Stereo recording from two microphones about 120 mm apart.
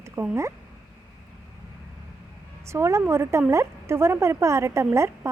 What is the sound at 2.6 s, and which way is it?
A woman's voice, 25° right (ahead or behind).